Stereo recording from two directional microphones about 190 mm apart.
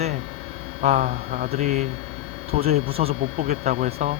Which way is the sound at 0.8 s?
40° right (ahead or behind).